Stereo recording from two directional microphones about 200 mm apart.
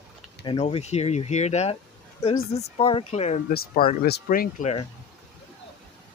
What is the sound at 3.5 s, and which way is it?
Speech, 45° left (ahead or behind).